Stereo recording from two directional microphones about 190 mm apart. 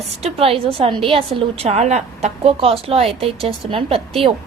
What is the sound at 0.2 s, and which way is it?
A woman's voice, 30° right (ahead or behind).